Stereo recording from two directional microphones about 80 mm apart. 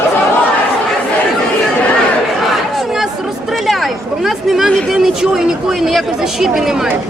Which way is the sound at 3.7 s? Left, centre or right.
Centre.